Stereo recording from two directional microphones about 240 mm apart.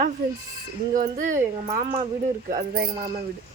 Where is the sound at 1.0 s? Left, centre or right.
Right.